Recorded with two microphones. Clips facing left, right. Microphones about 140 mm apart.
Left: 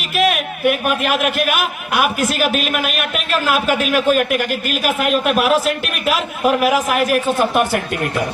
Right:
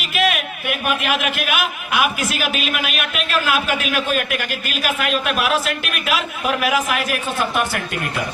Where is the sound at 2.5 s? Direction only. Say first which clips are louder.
Left 4 dB; centre (ahead or behind).